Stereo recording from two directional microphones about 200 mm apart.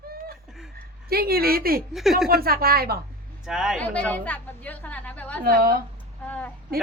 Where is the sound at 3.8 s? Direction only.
5° left (ahead or behind).